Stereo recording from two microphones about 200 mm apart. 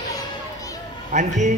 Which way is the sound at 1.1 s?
35° right (ahead or behind).